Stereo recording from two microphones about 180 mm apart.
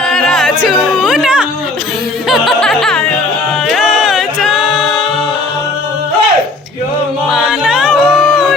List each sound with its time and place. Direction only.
0.1 s music: 5° left (ahead or behind)
7.3 s music: 5° right (ahead or behind)